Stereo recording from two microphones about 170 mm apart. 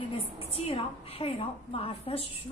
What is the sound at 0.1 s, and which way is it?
A woman's voice, 35° left (ahead or behind).